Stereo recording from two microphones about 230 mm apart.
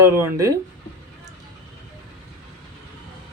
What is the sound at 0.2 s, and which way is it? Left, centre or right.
Speech, centre.